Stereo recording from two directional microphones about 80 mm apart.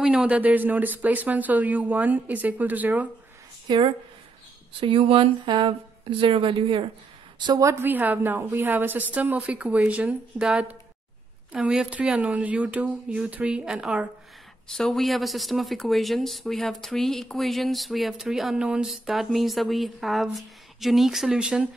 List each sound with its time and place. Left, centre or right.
0.0 s speech: centre
3.7 s speech: right
4.7 s speech: right
7.8 s speech: right
11.5 s speech: centre
14.7 s speech: centre